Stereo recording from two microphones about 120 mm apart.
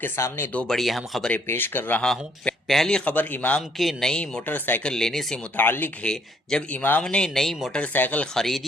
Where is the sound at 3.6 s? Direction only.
Centre (ahead or behind).